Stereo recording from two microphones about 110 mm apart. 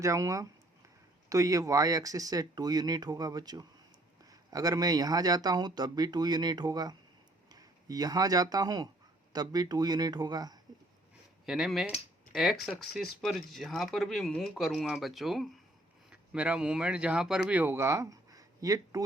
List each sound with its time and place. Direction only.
0.0 s speech: 30° right (ahead or behind)
11.4 s speech: 5° right (ahead or behind); by 19.0 s 30° right (ahead or behind)